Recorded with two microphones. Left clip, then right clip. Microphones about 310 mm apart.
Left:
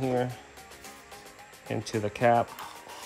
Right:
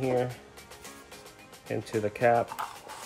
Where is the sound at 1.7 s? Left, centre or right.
Left.